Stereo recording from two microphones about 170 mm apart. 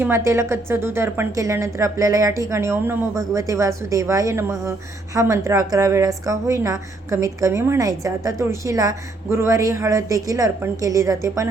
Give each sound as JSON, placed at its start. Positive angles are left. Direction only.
{"t": 0.0, "sound": "a woman's voice", "side_deg": -15}